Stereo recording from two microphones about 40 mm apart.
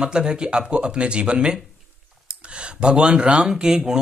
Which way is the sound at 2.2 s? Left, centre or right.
Right.